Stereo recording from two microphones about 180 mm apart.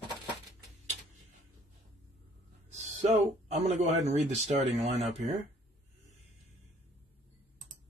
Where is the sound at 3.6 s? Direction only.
40° right (ahead or behind).